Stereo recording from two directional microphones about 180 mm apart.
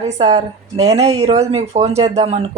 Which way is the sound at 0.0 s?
40° right (ahead or behind).